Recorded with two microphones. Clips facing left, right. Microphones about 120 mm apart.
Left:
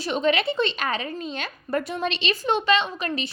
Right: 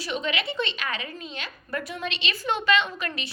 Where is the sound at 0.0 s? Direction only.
40° left (ahead or behind).